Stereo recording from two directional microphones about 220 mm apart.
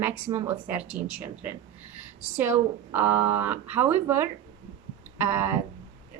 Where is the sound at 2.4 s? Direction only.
10° right (ahead or behind).